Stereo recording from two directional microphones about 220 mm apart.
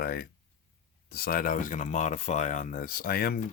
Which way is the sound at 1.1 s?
45° left (ahead or behind).